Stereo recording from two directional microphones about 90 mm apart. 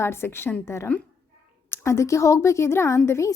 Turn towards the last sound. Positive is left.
turn(degrees=35)  # may be behind; listen again after turning